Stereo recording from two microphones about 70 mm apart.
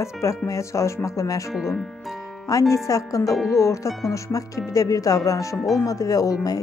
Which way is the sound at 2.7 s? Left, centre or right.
Left.